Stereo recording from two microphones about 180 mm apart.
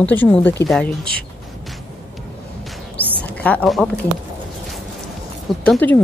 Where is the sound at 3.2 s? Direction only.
5° left (ahead or behind).